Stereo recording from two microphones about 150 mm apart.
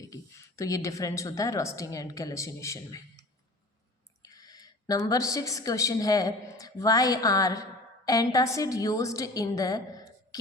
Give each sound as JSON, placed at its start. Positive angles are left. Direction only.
{"t": 0.0, "sound": "a woman's voice", "side_deg": 20}
{"t": 4.2, "sound": "a woman's voice", "side_deg": 25}